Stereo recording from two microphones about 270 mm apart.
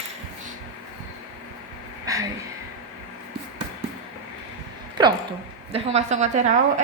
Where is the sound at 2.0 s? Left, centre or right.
Centre.